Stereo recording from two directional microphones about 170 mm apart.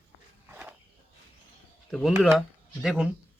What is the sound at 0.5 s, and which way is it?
Walk, 10° right (ahead or behind).